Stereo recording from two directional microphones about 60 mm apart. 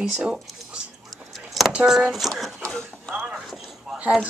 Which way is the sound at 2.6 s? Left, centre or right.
Centre.